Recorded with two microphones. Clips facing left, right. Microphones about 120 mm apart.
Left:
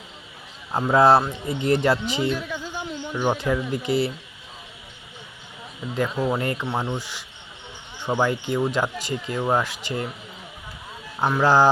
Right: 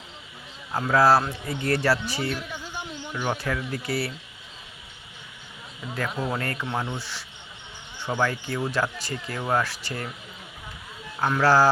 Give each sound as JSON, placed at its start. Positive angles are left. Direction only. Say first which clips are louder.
{"t": 0.7, "sound": "speech", "louder": "left 3 dB", "side_deg": 20}
{"t": 6.1, "sound": "speech", "louder": "left 5 dB", "side_deg": 15}
{"t": 11.2, "sound": "speech", "louder": "left 2 dB", "side_deg": 15}